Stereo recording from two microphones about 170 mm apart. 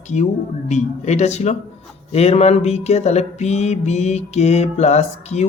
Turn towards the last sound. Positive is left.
turn(degrees=40)  # may be behind; listen again after turning